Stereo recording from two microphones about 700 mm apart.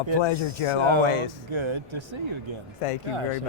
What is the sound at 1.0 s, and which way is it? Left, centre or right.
Speech, left.